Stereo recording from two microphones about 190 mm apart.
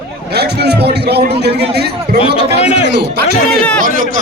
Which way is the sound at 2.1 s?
35° left (ahead or behind).